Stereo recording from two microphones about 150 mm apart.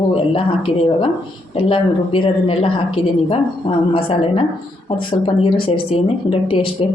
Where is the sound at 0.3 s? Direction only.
40° left (ahead or behind).